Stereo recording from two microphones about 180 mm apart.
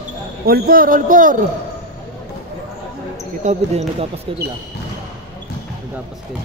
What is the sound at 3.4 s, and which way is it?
Speech, 40° right (ahead or behind).